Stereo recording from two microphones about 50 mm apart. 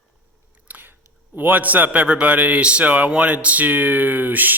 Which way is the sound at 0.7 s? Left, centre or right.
Right.